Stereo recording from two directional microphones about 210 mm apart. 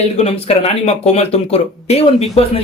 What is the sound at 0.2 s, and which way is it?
Speech, 30° left (ahead or behind).